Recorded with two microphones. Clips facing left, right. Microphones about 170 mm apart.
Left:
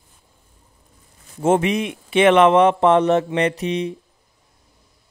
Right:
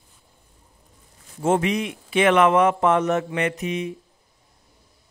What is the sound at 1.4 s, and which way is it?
A man's voice, 20° left (ahead or behind).